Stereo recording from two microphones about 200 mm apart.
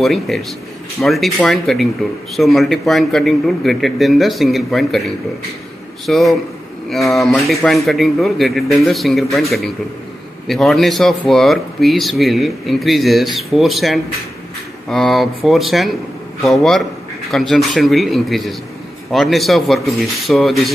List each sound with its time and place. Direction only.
0.0 s speech: centre (ahead or behind)